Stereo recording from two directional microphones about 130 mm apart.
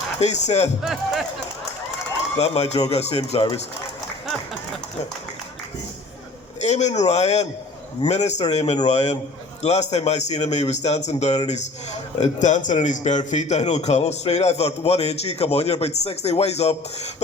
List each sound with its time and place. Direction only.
0.2 s a man's voice: 60° left (ahead or behind)
0.8 s speech: centre (ahead or behind)
2.4 s a man's voice: 55° left (ahead or behind)
6.6 s a man's voice: 60° left (ahead or behind)